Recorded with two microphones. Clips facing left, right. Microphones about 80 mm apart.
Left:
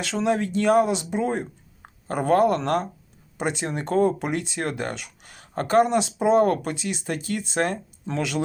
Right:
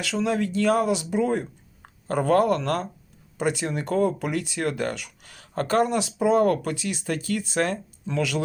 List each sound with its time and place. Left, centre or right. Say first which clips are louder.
0.0 s speech: left 1 dB; left